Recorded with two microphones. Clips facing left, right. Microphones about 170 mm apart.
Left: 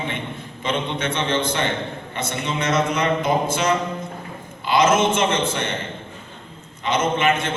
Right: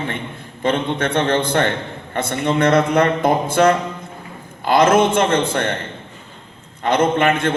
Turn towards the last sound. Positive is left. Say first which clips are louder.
# right 4 dB
turn(degrees=-55)  # may be behind; listen again after turning